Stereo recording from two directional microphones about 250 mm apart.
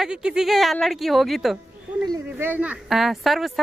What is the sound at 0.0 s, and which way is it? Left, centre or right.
A woman's voice, centre.